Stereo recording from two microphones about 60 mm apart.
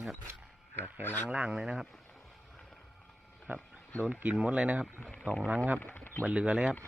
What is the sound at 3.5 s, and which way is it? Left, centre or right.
Speech, right.